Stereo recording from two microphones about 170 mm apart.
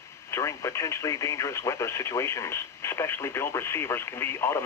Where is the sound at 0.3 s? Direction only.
15° left (ahead or behind).